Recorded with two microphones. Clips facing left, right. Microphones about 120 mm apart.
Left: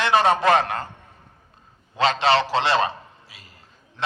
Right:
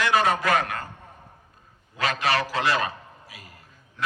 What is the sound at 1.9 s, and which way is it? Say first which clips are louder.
A man's voice: left 6 dB; 25° left (ahead or behind).